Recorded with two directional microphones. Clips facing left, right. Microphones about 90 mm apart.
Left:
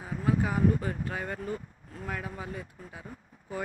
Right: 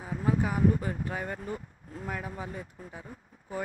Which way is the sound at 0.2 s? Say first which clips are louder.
Even; 10° right (ahead or behind).